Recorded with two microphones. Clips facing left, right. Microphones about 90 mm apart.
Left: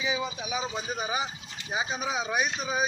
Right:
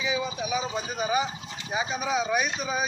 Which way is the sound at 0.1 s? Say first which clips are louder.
Right 3 dB; 20° left (ahead or behind).